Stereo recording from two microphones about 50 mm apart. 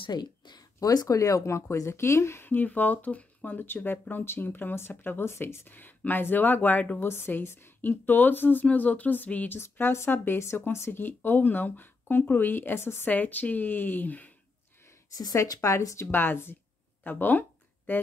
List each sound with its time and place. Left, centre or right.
1.0 s speech: left
2.4 s speech: left
5.8 s speech: left
7.0 s speech: left
9.6 s speech: left
10.9 s speech: left
13.0 s speech: left
15.3 s speech: left
16.1 s speech: left
17.0 s a sound: left